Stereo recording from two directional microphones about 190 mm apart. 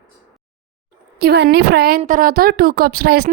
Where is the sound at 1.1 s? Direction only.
60° right (ahead or behind).